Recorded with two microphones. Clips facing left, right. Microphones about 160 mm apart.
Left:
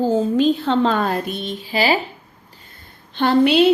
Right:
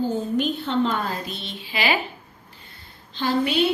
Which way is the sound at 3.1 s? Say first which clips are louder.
Left 7 dB; 65° left (ahead or behind).